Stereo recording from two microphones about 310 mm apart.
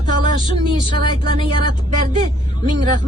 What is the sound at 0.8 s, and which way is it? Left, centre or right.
Speech, centre.